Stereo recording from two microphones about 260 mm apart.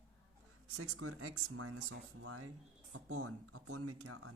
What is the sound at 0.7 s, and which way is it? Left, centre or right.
Speech, right.